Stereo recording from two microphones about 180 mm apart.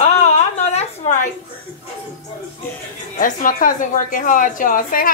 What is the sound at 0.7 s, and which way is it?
Speech, 40° left (ahead or behind).